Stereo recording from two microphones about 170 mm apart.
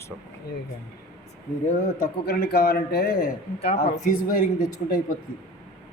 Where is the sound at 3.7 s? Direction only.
50° left (ahead or behind).